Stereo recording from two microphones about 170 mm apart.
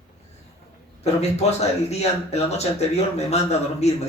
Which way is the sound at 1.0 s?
40° left (ahead or behind).